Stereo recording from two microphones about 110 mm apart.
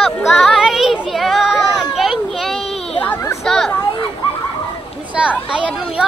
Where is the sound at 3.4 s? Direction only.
Centre (ahead or behind).